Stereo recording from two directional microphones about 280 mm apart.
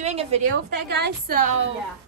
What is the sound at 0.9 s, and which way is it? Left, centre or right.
Speech, right.